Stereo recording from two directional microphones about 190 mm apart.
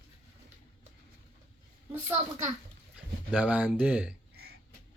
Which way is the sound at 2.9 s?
5° right (ahead or behind).